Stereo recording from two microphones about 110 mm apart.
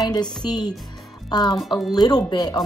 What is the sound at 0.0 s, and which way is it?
A woman's voice, 35° left (ahead or behind).